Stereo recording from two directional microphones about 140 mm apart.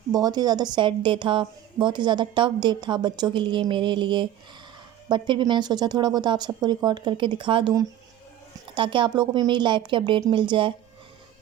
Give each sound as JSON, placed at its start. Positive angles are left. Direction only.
{"t": 0.1, "sound": "a woman's voice", "side_deg": -30}